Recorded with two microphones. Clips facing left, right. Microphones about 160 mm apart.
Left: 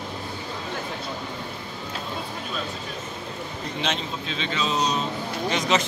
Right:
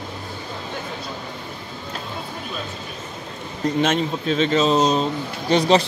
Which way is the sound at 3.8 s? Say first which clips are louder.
Right 8 dB; 50° right (ahead or behind).